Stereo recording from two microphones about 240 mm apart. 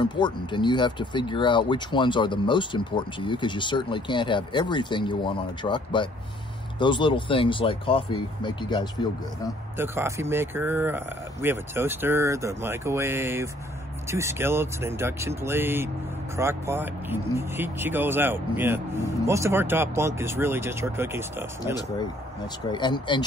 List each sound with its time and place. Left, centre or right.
0.0 s speech: centre
9.8 s speech: centre
22.7 s speech: centre